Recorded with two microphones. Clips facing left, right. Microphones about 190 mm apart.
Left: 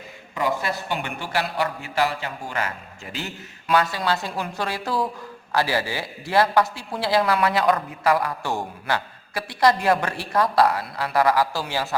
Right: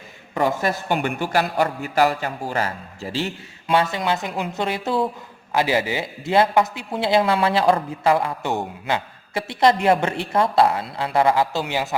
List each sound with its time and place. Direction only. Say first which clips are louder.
0.3 s a man's voice: right 4 dB; 45° right (ahead or behind); by 11.9 s 20° right (ahead or behind)